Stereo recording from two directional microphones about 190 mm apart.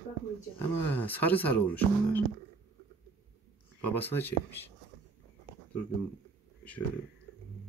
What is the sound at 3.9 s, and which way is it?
Speech, 10° left (ahead or behind).